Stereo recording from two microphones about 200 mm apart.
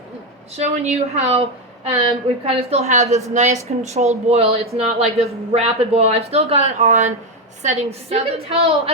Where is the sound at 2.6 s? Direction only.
30° right (ahead or behind).